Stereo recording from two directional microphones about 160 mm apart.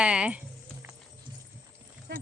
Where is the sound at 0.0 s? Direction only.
5° right (ahead or behind).